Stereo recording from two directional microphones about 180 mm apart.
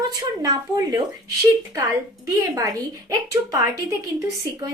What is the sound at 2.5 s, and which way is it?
A woman's voice, 20° right (ahead or behind).